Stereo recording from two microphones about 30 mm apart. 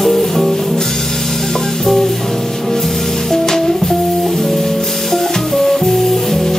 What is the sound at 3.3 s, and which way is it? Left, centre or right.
Music, centre.